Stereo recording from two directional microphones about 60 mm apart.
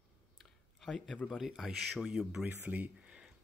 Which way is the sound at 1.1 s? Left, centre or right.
Centre.